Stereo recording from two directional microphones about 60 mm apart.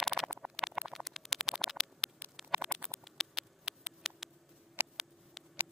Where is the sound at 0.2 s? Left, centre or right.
Centre.